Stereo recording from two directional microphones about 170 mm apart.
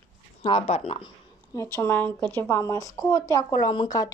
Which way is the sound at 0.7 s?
35° left (ahead or behind).